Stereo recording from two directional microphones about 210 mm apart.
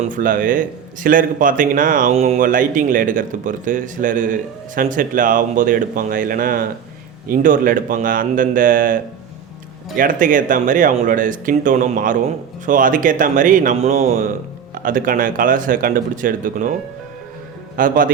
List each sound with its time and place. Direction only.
0.0 s a man's voice: 40° right (ahead or behind)
17.7 s a man's voice: 40° right (ahead or behind)